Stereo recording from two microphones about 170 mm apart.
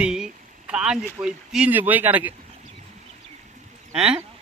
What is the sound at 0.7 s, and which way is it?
Speech, 5° right (ahead or behind).